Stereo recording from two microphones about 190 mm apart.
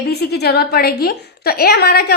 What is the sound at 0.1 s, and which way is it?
A woman's voice, 60° left (ahead or behind).